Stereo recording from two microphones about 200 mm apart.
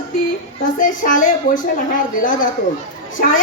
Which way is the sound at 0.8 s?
40° left (ahead or behind).